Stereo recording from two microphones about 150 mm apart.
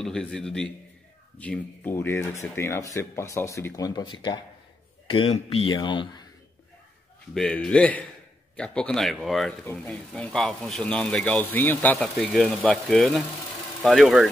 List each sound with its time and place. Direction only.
0.0 s a man's voice: 5° left (ahead or behind); by 6.2 s 35° left (ahead or behind)
7.3 s speech: 5° left (ahead or behind)